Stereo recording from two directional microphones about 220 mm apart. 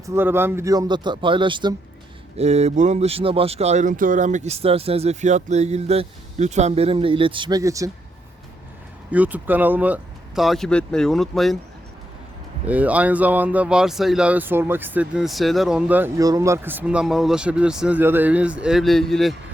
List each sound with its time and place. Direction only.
0.0 s speech: 10° right (ahead or behind)
9.0 s speech: 5° right (ahead or behind)
12.6 s speech: 5° right (ahead or behind)